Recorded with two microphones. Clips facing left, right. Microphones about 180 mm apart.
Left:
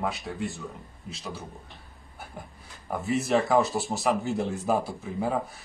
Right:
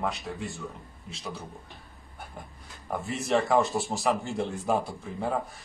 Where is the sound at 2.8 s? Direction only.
Centre (ahead or behind).